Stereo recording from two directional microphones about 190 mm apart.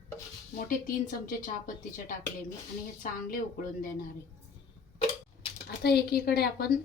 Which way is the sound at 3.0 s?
45° left (ahead or behind).